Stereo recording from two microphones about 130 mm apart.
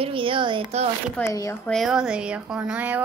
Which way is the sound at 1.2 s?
25° left (ahead or behind).